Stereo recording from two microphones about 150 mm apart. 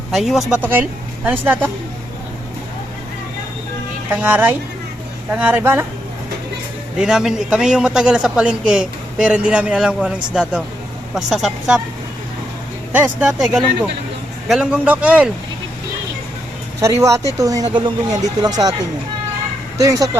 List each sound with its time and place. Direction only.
0.1 s a man's voice: centre (ahead or behind)
0.6 s speech: 10° right (ahead or behind)
4.1 s a man's voice: 10° right (ahead or behind)
7.0 s a man's voice: 5° right (ahead or behind)
12.9 s a man's voice: 10° right (ahead or behind)
16.8 s speech: 20° right (ahead or behind)
19.8 s speech: 20° right (ahead or behind)